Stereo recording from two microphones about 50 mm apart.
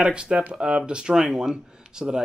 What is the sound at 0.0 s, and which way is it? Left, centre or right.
Speech, centre.